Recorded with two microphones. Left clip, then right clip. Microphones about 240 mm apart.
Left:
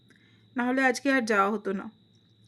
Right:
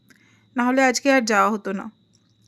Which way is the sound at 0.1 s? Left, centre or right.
Right.